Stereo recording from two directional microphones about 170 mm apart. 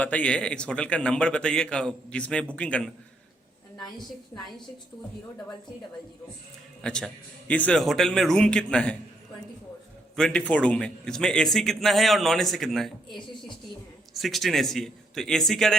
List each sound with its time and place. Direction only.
0.0 s a man's voice: 10° left (ahead or behind)
3.8 s a woman's voice: 25° left (ahead or behind)
6.8 s a man's voice: 5° left (ahead or behind)
10.2 s a man's voice: 5° left (ahead or behind)